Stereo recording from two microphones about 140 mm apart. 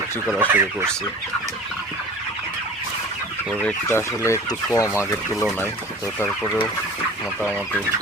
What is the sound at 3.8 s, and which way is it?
Speech, 20° left (ahead or behind).